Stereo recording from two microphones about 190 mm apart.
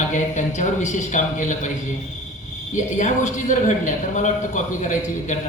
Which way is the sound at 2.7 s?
40° left (ahead or behind).